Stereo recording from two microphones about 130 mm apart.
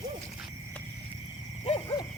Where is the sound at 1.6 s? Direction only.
45° left (ahead or behind).